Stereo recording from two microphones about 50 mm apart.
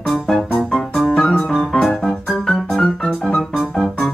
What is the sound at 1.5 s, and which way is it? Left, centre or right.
Music, centre.